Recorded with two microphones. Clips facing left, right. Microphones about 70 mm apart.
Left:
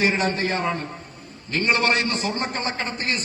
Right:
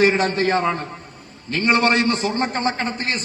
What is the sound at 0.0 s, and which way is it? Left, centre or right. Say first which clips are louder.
Speech: right 5 dB; right.